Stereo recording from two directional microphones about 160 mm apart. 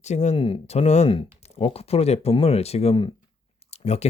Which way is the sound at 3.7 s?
40° left (ahead or behind).